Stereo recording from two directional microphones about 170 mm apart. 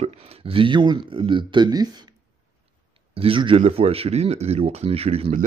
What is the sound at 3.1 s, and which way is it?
Speech, 30° right (ahead or behind).